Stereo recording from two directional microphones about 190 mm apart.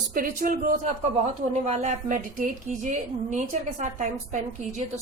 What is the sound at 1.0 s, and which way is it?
A woman's voice, 35° right (ahead or behind).